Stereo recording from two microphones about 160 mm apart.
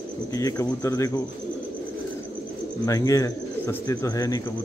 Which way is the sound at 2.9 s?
20° left (ahead or behind).